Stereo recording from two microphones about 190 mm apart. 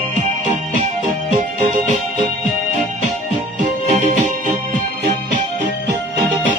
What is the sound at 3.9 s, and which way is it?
Music, 40° right (ahead or behind).